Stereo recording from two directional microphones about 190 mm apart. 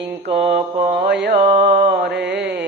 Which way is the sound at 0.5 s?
55° right (ahead or behind).